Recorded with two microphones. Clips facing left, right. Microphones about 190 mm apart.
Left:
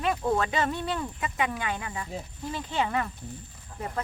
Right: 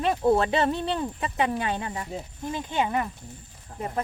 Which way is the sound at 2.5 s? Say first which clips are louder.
Right 2 dB; 20° right (ahead or behind).